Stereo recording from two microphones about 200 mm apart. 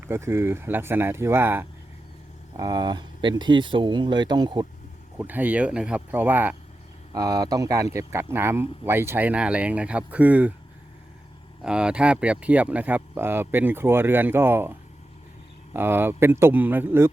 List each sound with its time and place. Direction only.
0.0 s speech: 10° right (ahead or behind)
5.1 s speech: 10° right (ahead or behind)
11.6 s speech: 5° right (ahead or behind)